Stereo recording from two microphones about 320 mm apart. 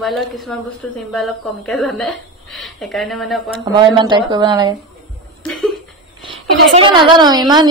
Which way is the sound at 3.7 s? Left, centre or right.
Centre.